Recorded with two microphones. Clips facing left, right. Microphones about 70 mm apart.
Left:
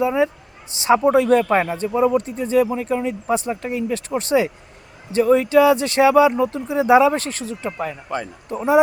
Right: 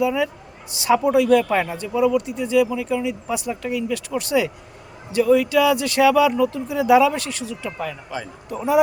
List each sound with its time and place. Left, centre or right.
0.0 s a man's voice: left
8.4 s speech: left